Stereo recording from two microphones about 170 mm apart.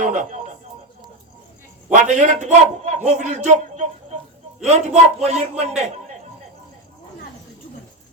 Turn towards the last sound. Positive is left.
turn(degrees=-40)  # may be behind; listen again after turning